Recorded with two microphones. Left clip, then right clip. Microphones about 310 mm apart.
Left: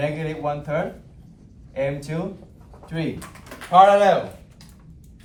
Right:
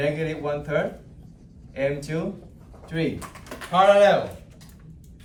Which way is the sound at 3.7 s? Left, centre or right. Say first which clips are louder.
Left 3 dB; centre.